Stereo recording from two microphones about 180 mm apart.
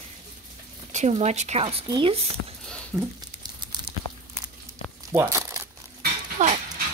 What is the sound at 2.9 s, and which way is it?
Speech, 10° right (ahead or behind).